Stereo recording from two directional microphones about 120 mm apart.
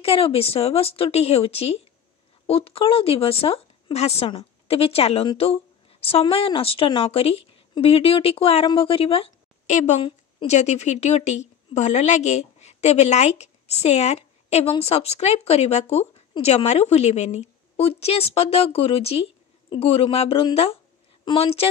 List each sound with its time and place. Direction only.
0.0 s speech: 55° left (ahead or behind)
5.4 s a sound: 55° left (ahead or behind)
6.3 s speech: 50° left (ahead or behind)
9.7 s a woman's voice: 70° left (ahead or behind); by 21.6 s 55° left (ahead or behind)